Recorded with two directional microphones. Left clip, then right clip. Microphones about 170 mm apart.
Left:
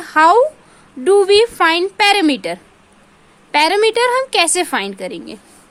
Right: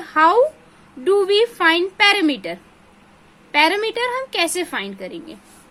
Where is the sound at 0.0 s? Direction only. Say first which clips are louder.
Left 4 dB; 30° left (ahead or behind).